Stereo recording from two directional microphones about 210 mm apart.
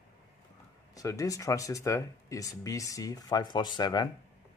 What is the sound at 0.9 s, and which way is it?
Speech, 15° left (ahead or behind).